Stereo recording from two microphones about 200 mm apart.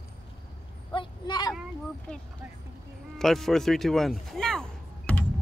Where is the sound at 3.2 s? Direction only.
Centre (ahead or behind).